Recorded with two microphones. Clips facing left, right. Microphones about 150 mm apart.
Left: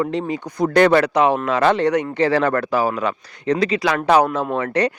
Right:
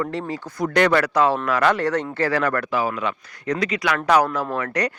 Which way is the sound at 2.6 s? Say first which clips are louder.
Left 4 dB; 40° left (ahead or behind).